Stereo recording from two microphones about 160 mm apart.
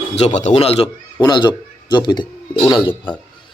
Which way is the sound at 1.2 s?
25° left (ahead or behind).